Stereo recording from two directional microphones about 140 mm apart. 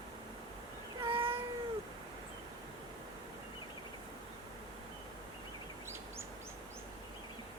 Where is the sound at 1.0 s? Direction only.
40° right (ahead or behind).